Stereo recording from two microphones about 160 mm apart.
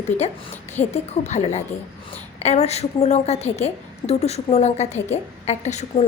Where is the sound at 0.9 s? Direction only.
45° left (ahead or behind).